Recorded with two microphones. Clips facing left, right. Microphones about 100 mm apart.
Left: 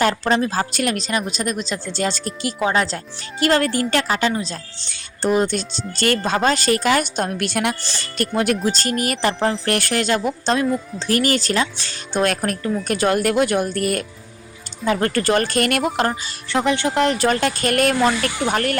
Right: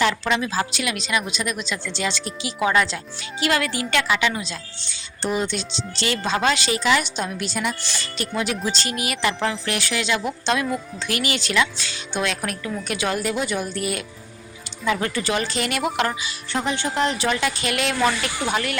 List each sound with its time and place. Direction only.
0.0 s a woman's voice: 40° left (ahead or behind); by 7.8 s 65° left (ahead or behind)
7.8 s a woman's voice: 35° left (ahead or behind)
8.6 s speech: 45° left (ahead or behind)
10.4 s a woman's voice: 35° left (ahead or behind); by 15.8 s 55° left (ahead or behind)
16.0 s a woman's voice: 40° left (ahead or behind)
16.5 s speech: 65° left (ahead or behind); by 18.8 s 45° left (ahead or behind)